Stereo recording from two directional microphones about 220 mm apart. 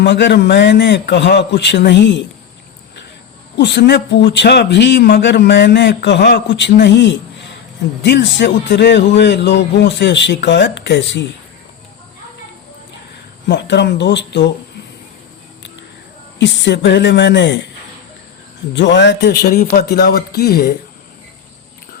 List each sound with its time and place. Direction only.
0.0 s a man's voice: 50° left (ahead or behind)
3.6 s a man's voice: 50° left (ahead or behind)
13.5 s a man's voice: 50° left (ahead or behind)
16.4 s a man's voice: 55° left (ahead or behind)
18.7 s a man's voice: 55° left (ahead or behind)